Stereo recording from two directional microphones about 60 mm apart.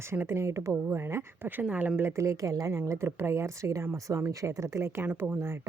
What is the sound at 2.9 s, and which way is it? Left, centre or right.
A woman's voice, right.